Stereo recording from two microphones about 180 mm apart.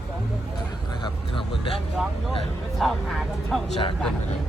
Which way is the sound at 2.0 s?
Centre (ahead or behind).